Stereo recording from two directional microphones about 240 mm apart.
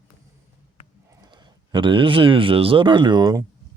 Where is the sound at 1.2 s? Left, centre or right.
Centre.